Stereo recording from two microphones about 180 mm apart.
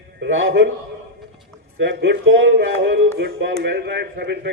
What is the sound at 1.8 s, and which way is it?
Speech, 75° right (ahead or behind).